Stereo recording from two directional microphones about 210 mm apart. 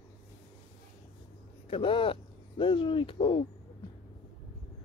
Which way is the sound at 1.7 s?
25° left (ahead or behind).